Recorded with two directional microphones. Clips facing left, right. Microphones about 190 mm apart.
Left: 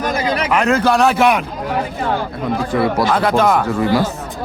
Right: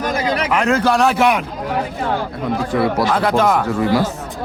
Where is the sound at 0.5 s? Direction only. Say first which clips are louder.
Left 2 dB; 55° left (ahead or behind).